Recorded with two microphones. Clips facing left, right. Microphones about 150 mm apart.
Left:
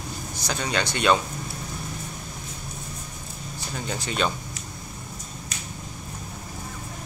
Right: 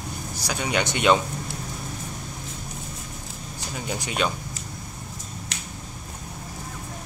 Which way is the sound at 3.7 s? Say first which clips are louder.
Even; 10° right (ahead or behind).